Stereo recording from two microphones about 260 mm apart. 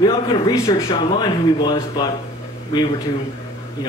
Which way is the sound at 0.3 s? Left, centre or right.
Centre.